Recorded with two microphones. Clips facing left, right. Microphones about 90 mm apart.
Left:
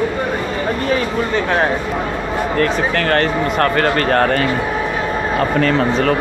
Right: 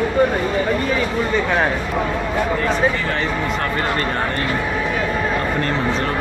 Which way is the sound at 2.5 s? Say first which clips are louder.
Left 4 dB; 70° left (ahead or behind).